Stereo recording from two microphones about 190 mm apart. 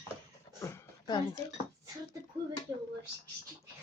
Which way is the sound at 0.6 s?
15° left (ahead or behind).